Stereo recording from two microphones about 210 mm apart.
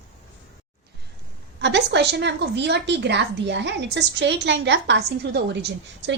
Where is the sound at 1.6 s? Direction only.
55° right (ahead or behind).